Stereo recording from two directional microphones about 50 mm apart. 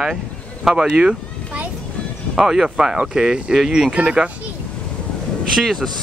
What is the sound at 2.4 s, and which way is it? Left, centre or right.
Speech, centre.